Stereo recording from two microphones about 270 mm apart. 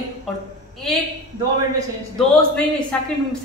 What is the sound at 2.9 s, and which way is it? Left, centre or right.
Speech, centre.